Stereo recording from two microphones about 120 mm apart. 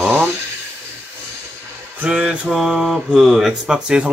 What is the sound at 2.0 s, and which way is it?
Speech, 10° right (ahead or behind).